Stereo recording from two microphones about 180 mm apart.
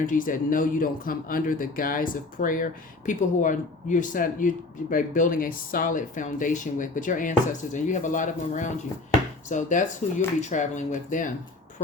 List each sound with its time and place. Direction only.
0.0 s speech: 50° left (ahead or behind)